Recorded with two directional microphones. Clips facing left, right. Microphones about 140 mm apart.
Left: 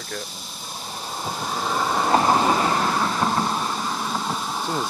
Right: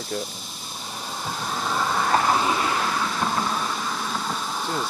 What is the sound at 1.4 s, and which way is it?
Vehicle, 10° left (ahead or behind).